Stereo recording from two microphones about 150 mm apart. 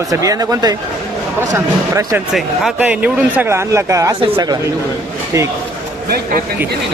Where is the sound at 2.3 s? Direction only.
5° right (ahead or behind); by 4.1 s 20° right (ahead or behind).